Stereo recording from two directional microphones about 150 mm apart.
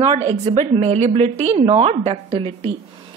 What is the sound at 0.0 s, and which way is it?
A woman's voice, 45° right (ahead or behind).